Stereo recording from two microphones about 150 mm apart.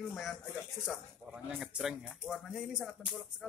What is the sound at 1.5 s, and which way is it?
A man's voice, 5° right (ahead or behind).